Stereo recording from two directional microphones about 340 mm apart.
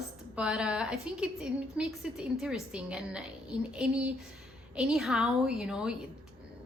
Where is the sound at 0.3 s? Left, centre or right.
Centre.